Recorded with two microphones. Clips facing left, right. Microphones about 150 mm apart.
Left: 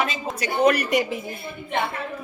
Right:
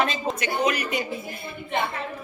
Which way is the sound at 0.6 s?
60° left (ahead or behind).